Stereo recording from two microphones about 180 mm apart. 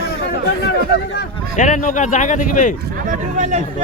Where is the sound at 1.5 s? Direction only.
45° left (ahead or behind).